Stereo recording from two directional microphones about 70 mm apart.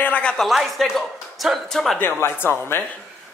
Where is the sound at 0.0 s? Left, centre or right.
Centre.